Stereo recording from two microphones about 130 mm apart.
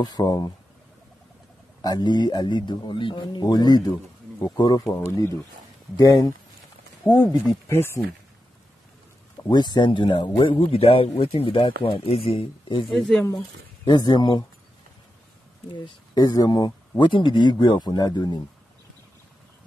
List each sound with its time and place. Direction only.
0.0 s speech: 30° left (ahead or behind)
1.8 s speech: 30° left (ahead or behind)
7.2 s speech: centre (ahead or behind)
7.6 s speech: 20° left (ahead or behind)
9.5 s speech: 35° left (ahead or behind)
12.8 s speech: centre (ahead or behind)
13.8 s speech: 35° left (ahead or behind)
15.7 s speech: 35° left (ahead or behind)